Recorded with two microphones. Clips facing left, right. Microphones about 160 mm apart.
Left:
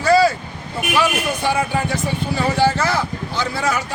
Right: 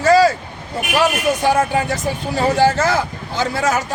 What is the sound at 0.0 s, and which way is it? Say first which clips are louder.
Vehicle: right 2 dB; 45° right (ahead or behind).